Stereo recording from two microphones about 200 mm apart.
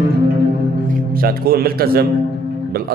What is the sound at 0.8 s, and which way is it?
A man's voice, 45° right (ahead or behind).